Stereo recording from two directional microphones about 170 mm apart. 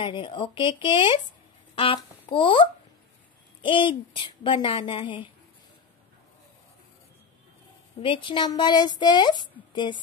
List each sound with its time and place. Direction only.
0.0 s a woman's voice: 30° left (ahead or behind)
8.0 s a woman's voice: 30° left (ahead or behind)